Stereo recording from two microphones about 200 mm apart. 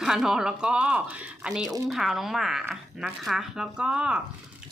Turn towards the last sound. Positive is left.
turn(degrees=-5)  # may be behind; listen again after turning